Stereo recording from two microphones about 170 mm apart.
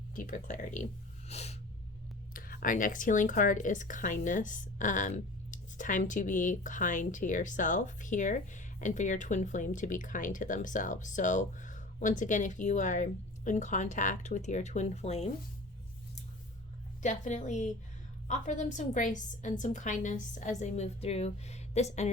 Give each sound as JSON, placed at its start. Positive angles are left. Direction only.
{"t": 0.2, "sound": "speech", "side_deg": 50}
{"t": 1.3, "sound": "snort", "side_deg": 40}
{"t": 2.3, "sound": "speech", "side_deg": 55}
{"t": 17.0, "sound": "speech", "side_deg": 45}